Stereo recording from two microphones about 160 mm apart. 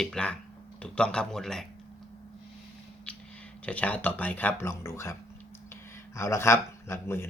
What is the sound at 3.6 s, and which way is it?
Speech, 10° left (ahead or behind).